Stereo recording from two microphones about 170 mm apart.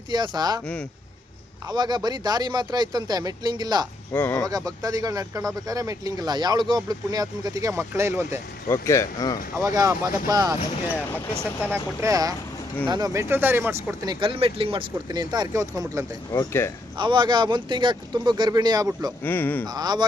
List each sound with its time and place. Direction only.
0.1 s speech: 25° right (ahead or behind)
1.7 s speech: 25° right (ahead or behind)
4.2 s speech: 10° left (ahead or behind)
4.4 s speech: 20° right (ahead or behind)
8.6 s speech: 15° left (ahead or behind)
9.6 s speech: 20° right (ahead or behind)
10.9 s speech: 10° left (ahead or behind)
11.7 s speech: 15° right (ahead or behind)
13.2 s speech: 15° right (ahead or behind)
16.3 s speech: 20° left (ahead or behind)
17.0 s speech: 30° right (ahead or behind)
19.2 s speech: 10° left (ahead or behind)
19.6 s speech: 25° right (ahead or behind)